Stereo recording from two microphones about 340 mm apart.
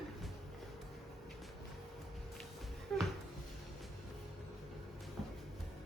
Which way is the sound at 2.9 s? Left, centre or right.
Centre.